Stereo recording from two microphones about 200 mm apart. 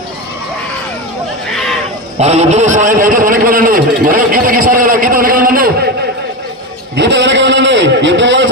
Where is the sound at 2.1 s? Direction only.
35° right (ahead or behind).